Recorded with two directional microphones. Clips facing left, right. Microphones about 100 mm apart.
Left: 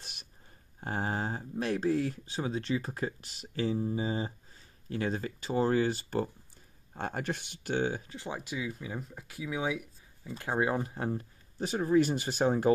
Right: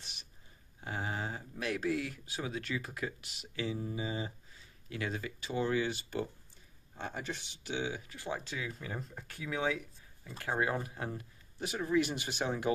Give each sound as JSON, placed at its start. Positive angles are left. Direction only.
{"t": 0.7, "sound": "speech", "side_deg": 40}
{"t": 7.0, "sound": "speech", "side_deg": 55}
{"t": 8.1, "sound": "speech", "side_deg": 20}